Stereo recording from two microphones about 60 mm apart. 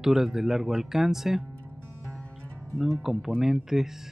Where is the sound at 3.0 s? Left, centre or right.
Centre.